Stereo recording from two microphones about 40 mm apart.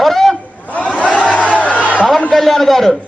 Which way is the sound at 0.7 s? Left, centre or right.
Left.